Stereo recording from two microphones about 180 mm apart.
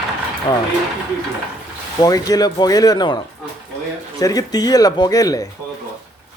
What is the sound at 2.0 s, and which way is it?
A woman's voice, 20° left (ahead or behind).